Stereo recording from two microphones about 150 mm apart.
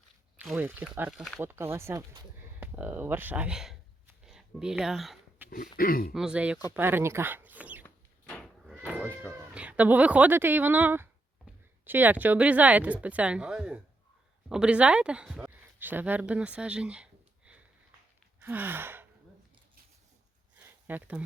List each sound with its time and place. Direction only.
0.4 s speech: 10° right (ahead or behind)
5.7 s speech: 75° left (ahead or behind)
6.1 s speech: 5° right (ahead or behind)
8.3 s goat: 5° left (ahead or behind)
9.6 s speech: 10° right (ahead or behind)
18.3 s gasp: 15° right (ahead or behind)
20.6 s a sound: 10° right (ahead or behind)